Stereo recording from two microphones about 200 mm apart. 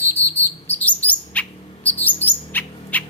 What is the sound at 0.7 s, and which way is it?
Bird, 10° left (ahead or behind).